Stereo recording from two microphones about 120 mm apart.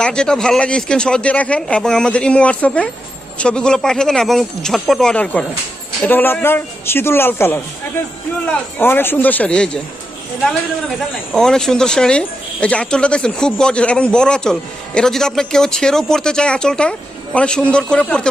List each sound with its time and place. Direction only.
0.0 s a man's voice: 5° left (ahead or behind)
11.3 s speech: 5° left (ahead or behind)